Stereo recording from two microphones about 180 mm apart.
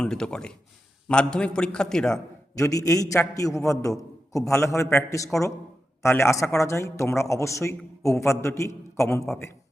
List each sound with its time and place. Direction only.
0.0 s a man's voice: 5° left (ahead or behind)
2.6 s a man's voice: 20° left (ahead or behind)